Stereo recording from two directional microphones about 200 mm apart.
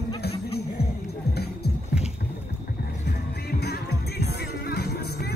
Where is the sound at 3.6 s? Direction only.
55° left (ahead or behind).